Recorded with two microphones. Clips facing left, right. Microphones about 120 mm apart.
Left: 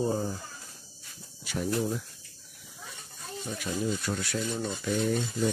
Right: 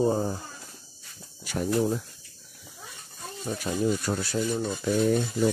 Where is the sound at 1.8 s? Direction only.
35° right (ahead or behind).